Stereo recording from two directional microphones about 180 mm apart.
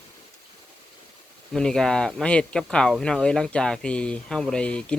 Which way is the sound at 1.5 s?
5° left (ahead or behind).